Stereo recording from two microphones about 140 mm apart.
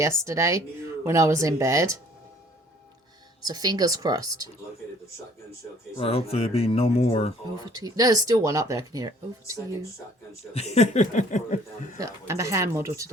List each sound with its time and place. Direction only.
0.0 s speech: 20° right (ahead or behind)
3.4 s speech: 30° right (ahead or behind)
6.0 s speech: 45° left (ahead or behind)
7.8 s speech: 25° right (ahead or behind)
10.5 s speech: 50° left (ahead or behind); by 11.9 s 65° left (ahead or behind)
11.9 s speech: 25° right (ahead or behind)